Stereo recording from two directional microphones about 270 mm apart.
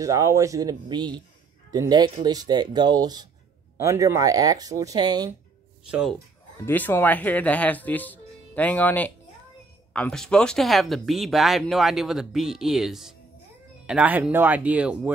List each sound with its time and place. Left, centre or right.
0.0 s speech: centre
6.6 s speech: centre